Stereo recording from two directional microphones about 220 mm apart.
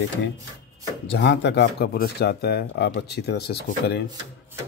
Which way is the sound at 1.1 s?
50° left (ahead or behind).